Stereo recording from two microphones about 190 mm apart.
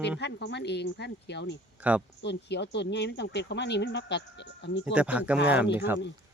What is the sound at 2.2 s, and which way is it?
Speech, 65° left (ahead or behind).